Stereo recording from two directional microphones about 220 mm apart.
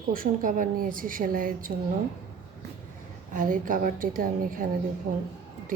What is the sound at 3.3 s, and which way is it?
A woman's voice, 35° right (ahead or behind).